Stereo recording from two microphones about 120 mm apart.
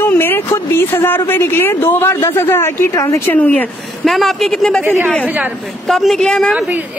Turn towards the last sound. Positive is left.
turn(degrees=-15)  # may be behind; listen again after turning